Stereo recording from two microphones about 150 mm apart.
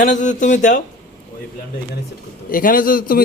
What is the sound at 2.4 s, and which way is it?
Speech, 70° left (ahead or behind).